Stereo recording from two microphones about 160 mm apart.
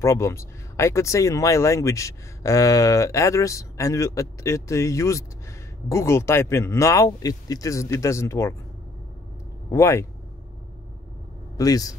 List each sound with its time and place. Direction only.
0.0 s speech: 20° left (ahead or behind)
9.7 s speech: 20° left (ahead or behind)
11.5 s a man's voice: 20° left (ahead or behind)